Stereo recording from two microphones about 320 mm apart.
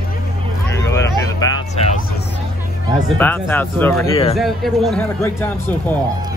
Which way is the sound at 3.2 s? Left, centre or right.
Centre.